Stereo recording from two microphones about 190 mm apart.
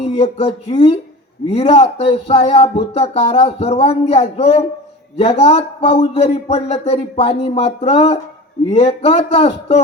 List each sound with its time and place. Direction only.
0.0 s speech: 35° left (ahead or behind)